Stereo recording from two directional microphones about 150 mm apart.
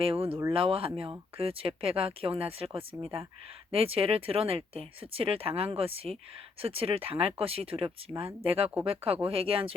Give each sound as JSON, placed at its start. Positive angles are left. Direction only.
{"t": 0.0, "sound": "speech", "side_deg": -40}
{"t": 0.3, "sound": "speech", "side_deg": -20}
{"t": 0.5, "sound": "speech", "side_deg": -40}